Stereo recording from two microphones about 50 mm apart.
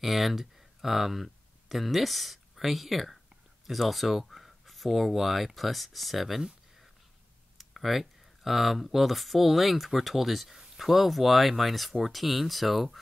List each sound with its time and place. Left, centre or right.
0.0 s speech: centre